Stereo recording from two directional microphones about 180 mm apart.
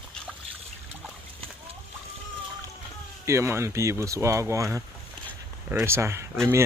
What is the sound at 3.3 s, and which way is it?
Speech, 15° right (ahead or behind).